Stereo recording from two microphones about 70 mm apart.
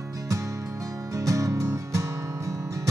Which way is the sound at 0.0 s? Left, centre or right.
Right.